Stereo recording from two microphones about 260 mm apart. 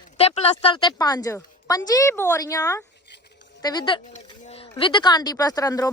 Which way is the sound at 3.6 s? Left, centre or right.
Centre.